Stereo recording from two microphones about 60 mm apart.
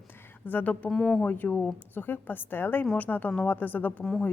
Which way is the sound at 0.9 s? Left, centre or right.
Centre.